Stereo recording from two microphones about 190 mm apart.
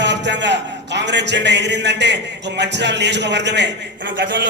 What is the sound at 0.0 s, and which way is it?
A man's voice, 70° right (ahead or behind).